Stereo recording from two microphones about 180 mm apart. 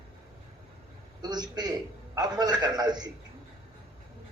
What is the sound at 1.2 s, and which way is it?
A man's voice, 20° right (ahead or behind).